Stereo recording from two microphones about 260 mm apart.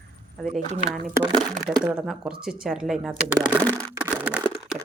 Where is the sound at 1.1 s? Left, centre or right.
Centre.